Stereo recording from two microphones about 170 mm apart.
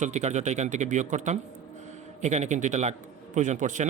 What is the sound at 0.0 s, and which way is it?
Speech, 40° right (ahead or behind).